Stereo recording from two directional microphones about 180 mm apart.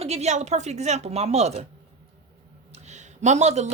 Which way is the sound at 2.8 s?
40° right (ahead or behind).